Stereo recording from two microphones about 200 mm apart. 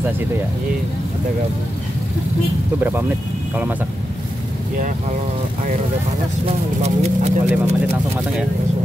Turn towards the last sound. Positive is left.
turn(degrees=-35)  # may be behind; listen again after turning